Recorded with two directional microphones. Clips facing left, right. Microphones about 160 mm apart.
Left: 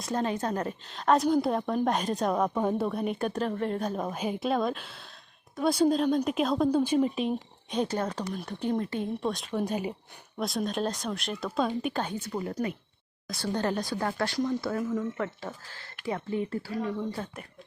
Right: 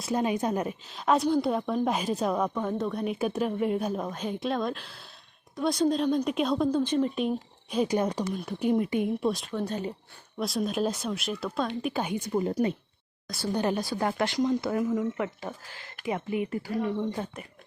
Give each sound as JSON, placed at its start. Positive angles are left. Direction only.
{"t": 0.0, "sound": "a woman's voice", "side_deg": -10}
{"t": 2.6, "sound": "speech", "side_deg": 10}
{"t": 4.0, "sound": "a woman's voice", "side_deg": 5}
{"t": 7.9, "sound": "speech", "side_deg": -15}
{"t": 8.3, "sound": "a woman's voice", "side_deg": 0}
{"t": 8.6, "sound": "speech", "side_deg": -15}
{"t": 9.6, "sound": "speech", "side_deg": 10}
{"t": 10.3, "sound": "a woman's voice", "side_deg": 0}
{"t": 12.0, "sound": "a woman's voice", "side_deg": -15}